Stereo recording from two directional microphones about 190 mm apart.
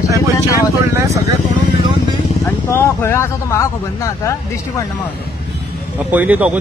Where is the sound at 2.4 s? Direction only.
15° left (ahead or behind).